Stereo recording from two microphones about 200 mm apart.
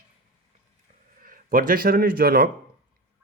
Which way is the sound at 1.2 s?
45° right (ahead or behind).